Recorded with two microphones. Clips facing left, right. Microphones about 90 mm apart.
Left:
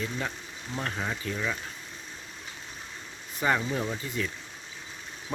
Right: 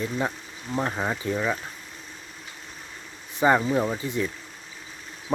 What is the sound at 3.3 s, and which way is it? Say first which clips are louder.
Speech: right 7 dB; 25° right (ahead or behind).